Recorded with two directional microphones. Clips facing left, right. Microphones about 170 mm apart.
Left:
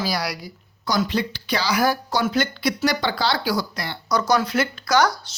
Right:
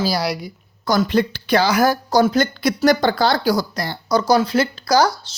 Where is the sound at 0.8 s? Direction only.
50° right (ahead or behind).